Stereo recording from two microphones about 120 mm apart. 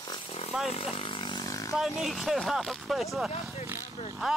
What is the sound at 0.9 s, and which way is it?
Wild animals, 50° left (ahead or behind).